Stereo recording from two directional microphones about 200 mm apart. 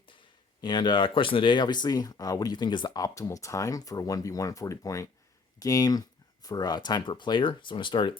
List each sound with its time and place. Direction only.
0.6 s speech: 20° left (ahead or behind)